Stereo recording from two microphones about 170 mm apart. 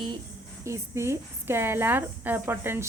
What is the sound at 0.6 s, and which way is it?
A woman's voice, 15° right (ahead or behind).